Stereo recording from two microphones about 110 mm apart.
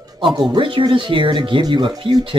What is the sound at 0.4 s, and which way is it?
Speech, 45° right (ahead or behind).